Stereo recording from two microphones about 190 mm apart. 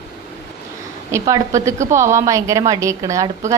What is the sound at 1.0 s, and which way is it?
Speech, 15° right (ahead or behind).